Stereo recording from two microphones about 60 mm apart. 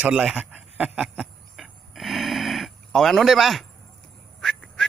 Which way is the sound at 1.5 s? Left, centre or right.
Centre.